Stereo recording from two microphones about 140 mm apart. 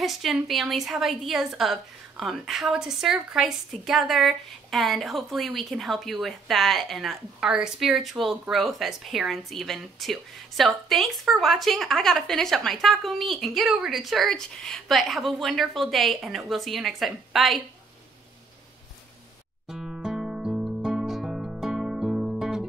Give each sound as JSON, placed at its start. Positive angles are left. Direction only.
{"t": 0.0, "sound": "a woman's voice", "side_deg": 0}
{"t": 19.7, "sound": "music", "side_deg": -5}